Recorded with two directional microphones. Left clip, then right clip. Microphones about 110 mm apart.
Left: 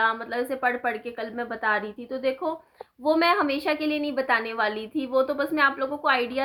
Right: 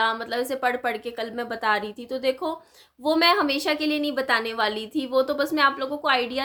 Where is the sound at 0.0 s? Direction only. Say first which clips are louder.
Right 1 dB; 40° right (ahead or behind).